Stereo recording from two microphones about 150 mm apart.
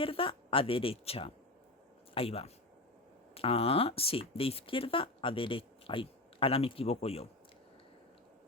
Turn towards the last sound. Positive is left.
turn(degrees=40)  # may be behind; listen again after turning